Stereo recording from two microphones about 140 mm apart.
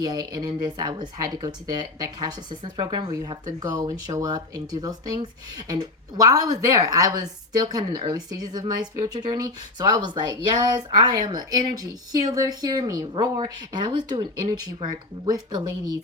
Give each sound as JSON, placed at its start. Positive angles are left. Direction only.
{"t": 0.0, "sound": "speech", "side_deg": -30}
{"t": 15.3, "sound": "speech", "side_deg": -30}